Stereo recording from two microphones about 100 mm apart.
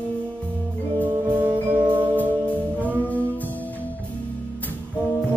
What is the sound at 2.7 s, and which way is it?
Music, 15° left (ahead or behind).